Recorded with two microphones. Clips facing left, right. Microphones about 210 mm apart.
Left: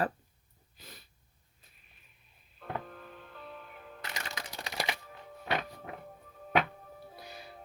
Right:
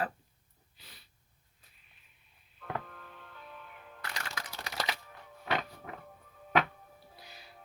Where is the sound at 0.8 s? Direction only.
45° left (ahead or behind).